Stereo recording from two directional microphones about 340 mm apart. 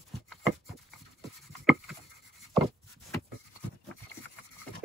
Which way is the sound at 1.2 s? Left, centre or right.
Centre.